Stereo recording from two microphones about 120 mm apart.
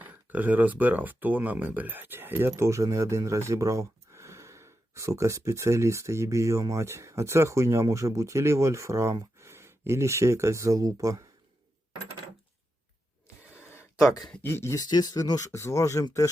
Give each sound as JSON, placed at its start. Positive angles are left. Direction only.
{"t": 0.0, "sound": "speech", "side_deg": -15}
{"t": 13.7, "sound": "a sound", "side_deg": 25}
{"t": 14.2, "sound": "speech", "side_deg": 5}
{"t": 14.4, "sound": "speech", "side_deg": 20}
{"t": 14.8, "sound": "speech", "side_deg": 35}